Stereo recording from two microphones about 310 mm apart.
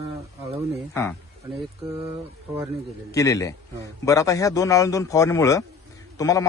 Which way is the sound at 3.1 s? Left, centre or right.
Centre.